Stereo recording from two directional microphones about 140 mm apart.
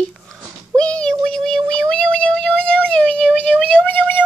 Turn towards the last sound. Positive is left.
turn(degrees=15)  # may be behind; listen again after turning